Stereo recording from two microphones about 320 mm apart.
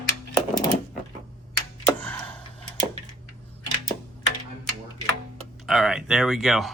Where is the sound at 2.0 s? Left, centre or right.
Centre.